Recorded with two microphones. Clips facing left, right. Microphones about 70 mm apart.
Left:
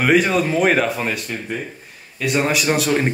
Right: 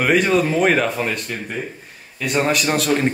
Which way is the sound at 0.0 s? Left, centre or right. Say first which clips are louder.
Even; centre.